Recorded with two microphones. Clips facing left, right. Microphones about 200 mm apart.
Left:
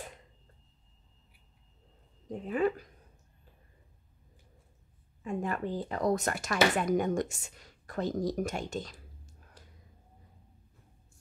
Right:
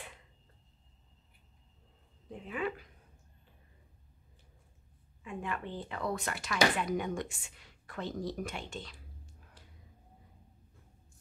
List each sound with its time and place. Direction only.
2.2 s speech: 40° left (ahead or behind)
5.2 s speech: 40° left (ahead or behind)